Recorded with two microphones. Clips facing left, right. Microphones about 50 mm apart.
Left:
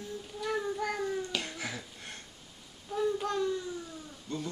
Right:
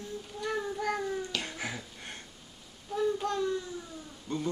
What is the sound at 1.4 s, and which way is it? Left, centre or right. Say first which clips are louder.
Finger snapping: right 1 dB; right.